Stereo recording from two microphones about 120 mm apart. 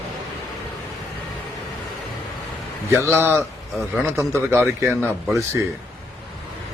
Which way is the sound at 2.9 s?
20° right (ahead or behind).